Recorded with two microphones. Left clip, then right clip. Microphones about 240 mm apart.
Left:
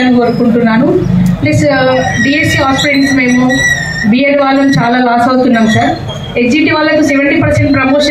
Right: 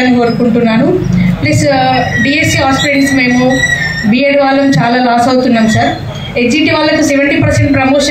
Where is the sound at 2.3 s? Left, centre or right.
Right.